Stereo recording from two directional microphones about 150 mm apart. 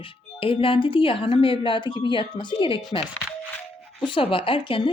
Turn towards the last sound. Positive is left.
turn(degrees=35)  # may be behind; listen again after turning